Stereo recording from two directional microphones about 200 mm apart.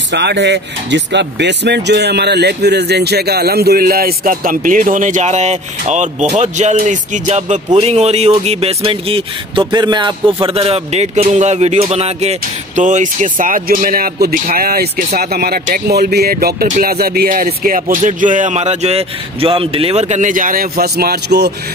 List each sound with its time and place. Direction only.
0.1 s speech: 60° right (ahead or behind)